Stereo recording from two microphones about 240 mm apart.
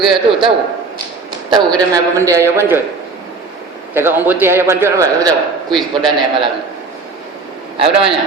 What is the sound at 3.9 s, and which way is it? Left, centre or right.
A man's voice, centre.